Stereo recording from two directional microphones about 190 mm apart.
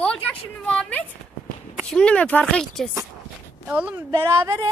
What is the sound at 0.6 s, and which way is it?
Speech, 5° left (ahead or behind).